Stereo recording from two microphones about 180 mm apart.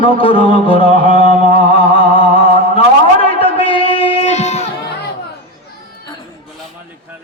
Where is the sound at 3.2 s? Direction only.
30° left (ahead or behind).